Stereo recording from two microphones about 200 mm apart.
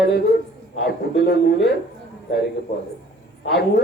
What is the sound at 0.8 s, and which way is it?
Speech, 55° left (ahead or behind).